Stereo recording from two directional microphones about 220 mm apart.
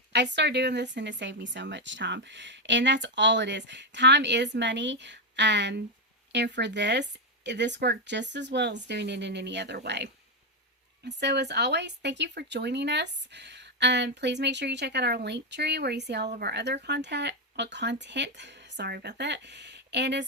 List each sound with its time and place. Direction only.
0.1 s speech: 50° right (ahead or behind)